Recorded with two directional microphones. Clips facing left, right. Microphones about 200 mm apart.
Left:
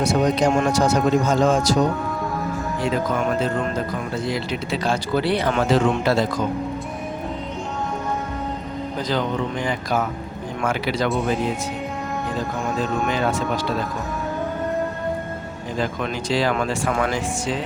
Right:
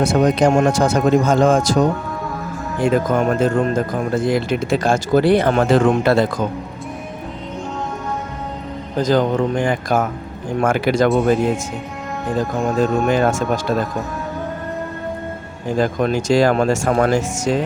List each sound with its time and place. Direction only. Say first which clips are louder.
0.0 s speech: right 4 dB; 50° right (ahead or behind)
2.8 s speech: right 7 dB; 50° right (ahead or behind)
9.0 s speech: right 8 dB; 45° right (ahead or behind)
12.8 s speech: right 7 dB; 50° right (ahead or behind)
15.8 s speech: right 7 dB; 45° right (ahead or behind)